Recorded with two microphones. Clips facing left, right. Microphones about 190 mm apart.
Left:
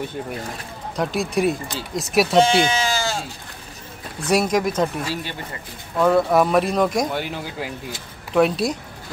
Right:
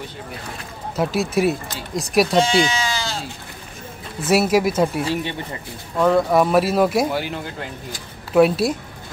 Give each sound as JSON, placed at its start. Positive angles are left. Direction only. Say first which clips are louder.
{"t": 0.9, "sound": "speech", "louder": "right 2 dB", "side_deg": -5}
{"t": 2.5, "sound": "speech", "louder": "even", "side_deg": 50}
{"t": 4.2, "sound": "speech", "louder": "right 2 dB", "side_deg": -5}